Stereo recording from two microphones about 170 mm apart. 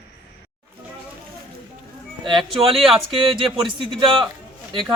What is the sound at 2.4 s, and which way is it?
Speech, centre (ahead or behind).